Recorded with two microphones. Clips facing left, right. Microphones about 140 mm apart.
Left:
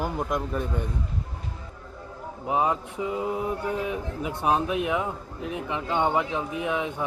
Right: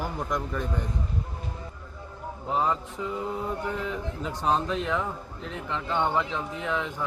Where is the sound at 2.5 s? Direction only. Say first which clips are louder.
Left 2 dB; 15° left (ahead or behind).